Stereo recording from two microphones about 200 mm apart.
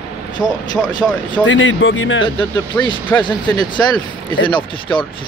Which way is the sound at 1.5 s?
70° left (ahead or behind).